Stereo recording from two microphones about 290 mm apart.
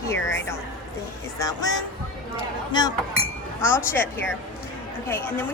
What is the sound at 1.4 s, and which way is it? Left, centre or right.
Speech, centre.